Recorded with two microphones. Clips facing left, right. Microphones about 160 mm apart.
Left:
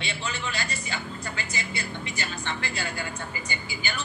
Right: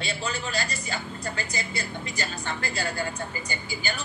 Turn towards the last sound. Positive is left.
turn(degrees=-40)  # may be behind; listen again after turning